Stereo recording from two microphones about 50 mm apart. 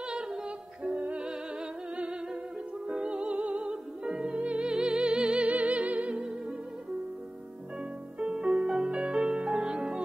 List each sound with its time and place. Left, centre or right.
0.0 s music: centre
2.9 s music: right
8.2 s music: centre